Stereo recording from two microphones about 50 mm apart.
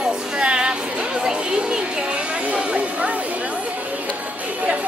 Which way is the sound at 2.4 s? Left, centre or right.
Right.